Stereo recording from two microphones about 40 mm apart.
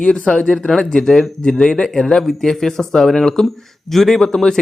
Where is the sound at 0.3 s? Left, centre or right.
Centre.